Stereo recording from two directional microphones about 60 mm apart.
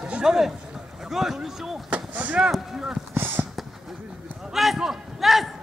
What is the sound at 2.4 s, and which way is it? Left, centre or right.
Speech, centre.